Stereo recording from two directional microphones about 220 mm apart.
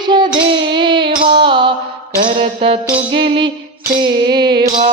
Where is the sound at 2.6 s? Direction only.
25° right (ahead or behind).